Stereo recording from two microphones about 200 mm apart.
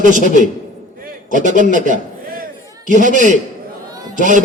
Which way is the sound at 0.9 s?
45° right (ahead or behind).